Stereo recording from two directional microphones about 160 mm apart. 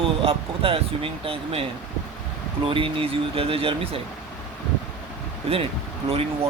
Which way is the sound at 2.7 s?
35° right (ahead or behind).